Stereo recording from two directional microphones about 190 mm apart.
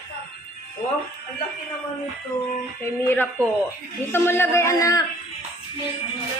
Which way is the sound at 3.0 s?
10° left (ahead or behind).